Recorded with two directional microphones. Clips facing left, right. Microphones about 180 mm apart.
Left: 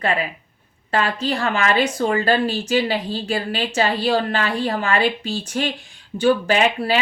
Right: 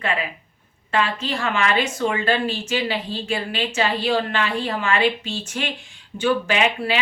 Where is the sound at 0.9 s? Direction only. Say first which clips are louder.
Left 2 dB; 35° left (ahead or behind).